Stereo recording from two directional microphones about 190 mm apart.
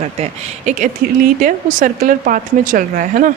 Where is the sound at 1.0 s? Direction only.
50° right (ahead or behind).